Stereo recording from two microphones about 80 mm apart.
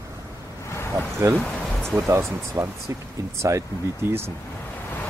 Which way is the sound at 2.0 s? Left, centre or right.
Right.